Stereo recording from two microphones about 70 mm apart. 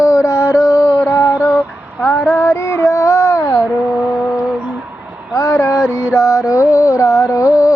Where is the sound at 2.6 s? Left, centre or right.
Left.